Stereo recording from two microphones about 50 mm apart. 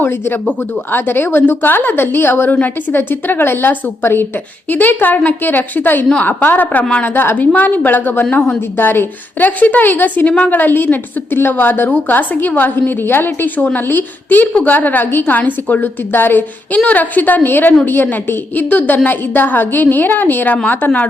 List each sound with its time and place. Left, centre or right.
0.0 s a woman's voice: left
16.7 s a woman's voice: left